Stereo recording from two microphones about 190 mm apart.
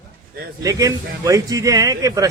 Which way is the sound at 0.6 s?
20° right (ahead or behind).